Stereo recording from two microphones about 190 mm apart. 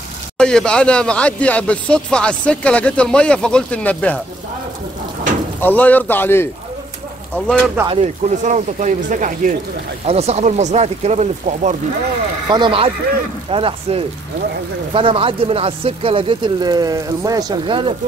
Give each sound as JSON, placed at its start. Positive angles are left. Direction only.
{"t": 0.4, "sound": "speech", "side_deg": 5}
{"t": 5.6, "sound": "a man's voice", "side_deg": 10}
{"t": 8.0, "sound": "speech", "side_deg": -35}
{"t": 12.4, "sound": "speech", "side_deg": -25}